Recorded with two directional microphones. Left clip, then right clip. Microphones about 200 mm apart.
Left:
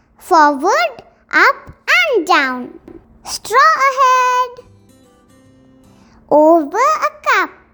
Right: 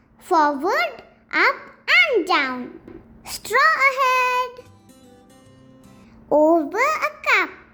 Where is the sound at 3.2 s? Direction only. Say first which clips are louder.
Left 7 dB; 30° left (ahead or behind).